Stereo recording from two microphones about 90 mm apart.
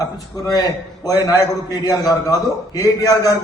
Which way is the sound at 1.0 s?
45° left (ahead or behind).